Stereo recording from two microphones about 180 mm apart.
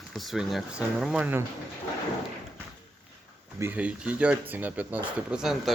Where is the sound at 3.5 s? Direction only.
10° right (ahead or behind).